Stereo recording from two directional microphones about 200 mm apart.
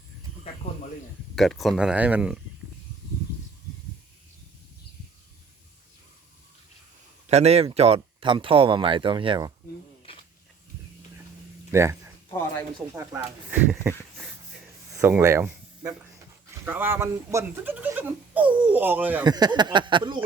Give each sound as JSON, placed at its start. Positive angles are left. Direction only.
{"t": 1.4, "sound": "speech", "side_deg": 0}
{"t": 7.3, "sound": "speech", "side_deg": -30}
{"t": 11.7, "sound": "a sound", "side_deg": -15}
{"t": 12.9, "sound": "speech", "side_deg": -10}
{"t": 14.9, "sound": "speech", "side_deg": -10}
{"t": 19.2, "sound": "speech", "side_deg": -20}